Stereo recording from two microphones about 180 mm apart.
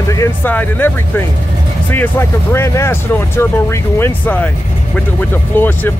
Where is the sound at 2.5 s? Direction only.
15° left (ahead or behind).